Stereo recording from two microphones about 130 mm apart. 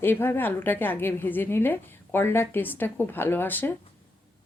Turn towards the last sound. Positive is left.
turn(degrees=15)  # may be behind; listen again after turning